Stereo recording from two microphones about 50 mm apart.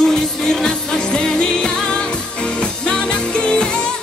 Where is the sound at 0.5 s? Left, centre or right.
Centre.